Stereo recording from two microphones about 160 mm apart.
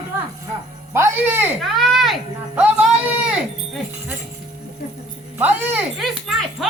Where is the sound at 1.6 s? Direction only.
Centre (ahead or behind).